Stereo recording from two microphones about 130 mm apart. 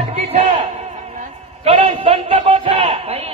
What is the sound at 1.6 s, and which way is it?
Speech, 50° right (ahead or behind).